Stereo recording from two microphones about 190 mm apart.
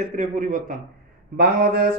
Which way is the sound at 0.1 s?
40° right (ahead or behind).